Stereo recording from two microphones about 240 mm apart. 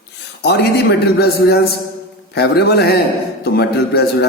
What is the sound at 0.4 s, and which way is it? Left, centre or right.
A man's voice, left.